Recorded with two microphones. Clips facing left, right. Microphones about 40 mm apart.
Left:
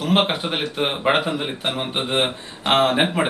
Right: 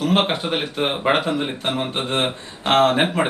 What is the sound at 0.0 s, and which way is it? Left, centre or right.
Speech, centre.